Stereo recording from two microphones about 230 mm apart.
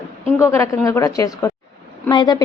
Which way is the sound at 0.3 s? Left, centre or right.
Centre.